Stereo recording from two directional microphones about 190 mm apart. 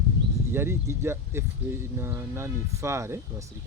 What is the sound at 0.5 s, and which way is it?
Speech, 10° right (ahead or behind).